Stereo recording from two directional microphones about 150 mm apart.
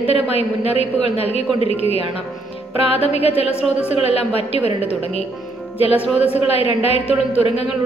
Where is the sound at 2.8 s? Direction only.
40° left (ahead or behind).